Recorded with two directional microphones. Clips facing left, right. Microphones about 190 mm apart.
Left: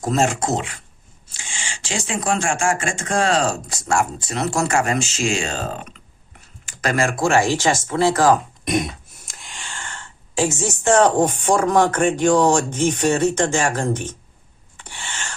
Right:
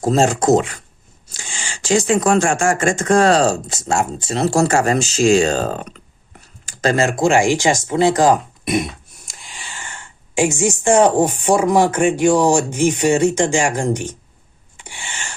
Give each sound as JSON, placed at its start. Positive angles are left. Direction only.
{"t": 0.0, "sound": "speech", "side_deg": -30}
{"t": 6.7, "sound": "speech", "side_deg": -25}
{"t": 8.6, "sound": "speech", "side_deg": -5}
{"t": 14.8, "sound": "a sound", "side_deg": -10}